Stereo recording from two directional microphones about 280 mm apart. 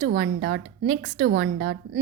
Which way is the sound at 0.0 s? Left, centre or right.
Right.